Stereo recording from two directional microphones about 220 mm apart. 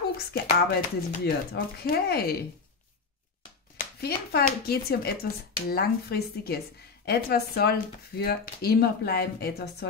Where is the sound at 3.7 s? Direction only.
45° left (ahead or behind).